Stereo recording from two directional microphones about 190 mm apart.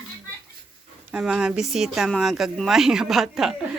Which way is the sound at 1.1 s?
5° right (ahead or behind).